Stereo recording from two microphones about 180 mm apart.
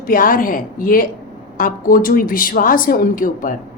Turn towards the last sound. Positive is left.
turn(degrees=50)  # may be behind; listen again after turning